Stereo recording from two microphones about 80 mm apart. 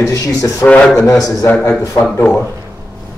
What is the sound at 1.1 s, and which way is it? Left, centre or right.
Speech, left.